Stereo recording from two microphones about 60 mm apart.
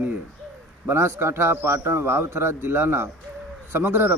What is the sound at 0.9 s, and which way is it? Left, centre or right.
A man's voice, right.